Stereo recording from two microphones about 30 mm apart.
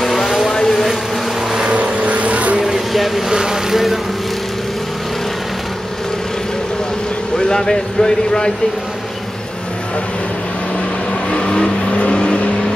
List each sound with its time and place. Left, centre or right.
0.0 s vehicle: centre
0.5 s vehicle: centre
1.7 s vehicle: right
2.6 s a sound: centre
3.3 s vehicle: right
7.3 s speech: centre
11.2 s vehicle: left
11.9 s vehicle: left